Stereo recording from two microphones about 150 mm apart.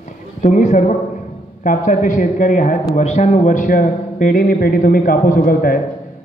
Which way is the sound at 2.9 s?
50° left (ahead or behind).